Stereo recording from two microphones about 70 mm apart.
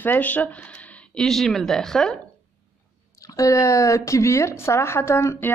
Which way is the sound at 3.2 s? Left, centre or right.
Left.